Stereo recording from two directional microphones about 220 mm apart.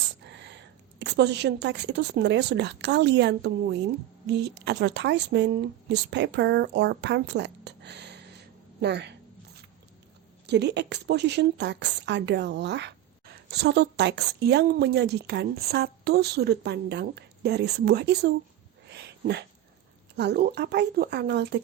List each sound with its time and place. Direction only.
0.3 s a woman's voice: 50° right (ahead or behind)
10.4 s a woman's voice: 50° right (ahead or behind)
18.9 s a sound: 50° right (ahead or behind)
20.1 s a woman's voice: 50° right (ahead or behind)